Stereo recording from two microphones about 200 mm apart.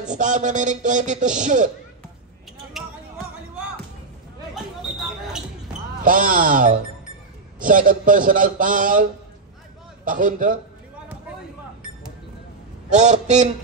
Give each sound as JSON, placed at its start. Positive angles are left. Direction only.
{"t": 0.0, "sound": "a man's voice", "side_deg": -40}
{"t": 2.8, "sound": "basketball bounce", "side_deg": 0}
{"t": 4.9, "sound": "basketball bounce", "side_deg": 0}
{"t": 6.0, "sound": "a man's voice", "side_deg": -45}
{"t": 12.9, "sound": "a man's voice", "side_deg": -35}